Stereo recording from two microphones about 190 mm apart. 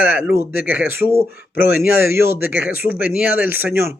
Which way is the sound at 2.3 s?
50° left (ahead or behind).